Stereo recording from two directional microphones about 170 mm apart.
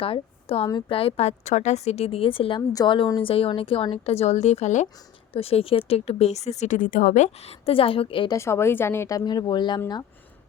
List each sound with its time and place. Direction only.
0.0 s a woman's voice: 35° left (ahead or behind)
8.4 s speech: 15° left (ahead or behind)